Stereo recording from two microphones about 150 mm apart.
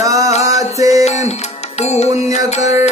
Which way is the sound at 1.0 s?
45° left (ahead or behind).